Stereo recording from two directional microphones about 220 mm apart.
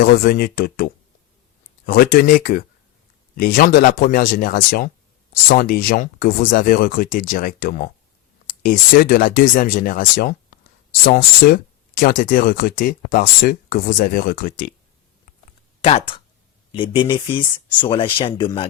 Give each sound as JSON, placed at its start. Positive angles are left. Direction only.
{"t": 0.0, "sound": "speech", "side_deg": 40}
{"t": 1.9, "sound": "speech", "side_deg": 40}
{"t": 15.8, "sound": "speech", "side_deg": 25}